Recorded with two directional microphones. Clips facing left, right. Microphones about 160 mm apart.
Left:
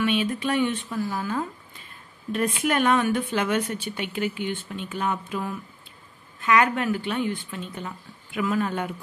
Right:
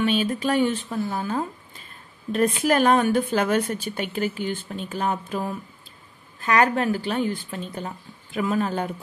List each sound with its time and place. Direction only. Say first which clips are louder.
0.0 s speech: right 2 dB; 35° right (ahead or behind)